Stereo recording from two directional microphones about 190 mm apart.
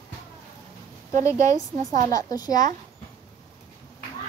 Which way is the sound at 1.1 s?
40° right (ahead or behind).